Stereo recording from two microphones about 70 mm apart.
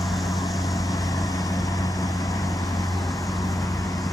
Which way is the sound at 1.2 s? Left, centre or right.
Left.